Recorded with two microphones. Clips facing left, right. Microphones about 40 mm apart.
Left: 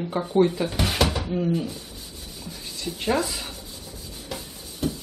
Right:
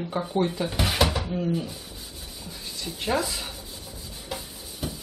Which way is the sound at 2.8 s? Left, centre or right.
Centre.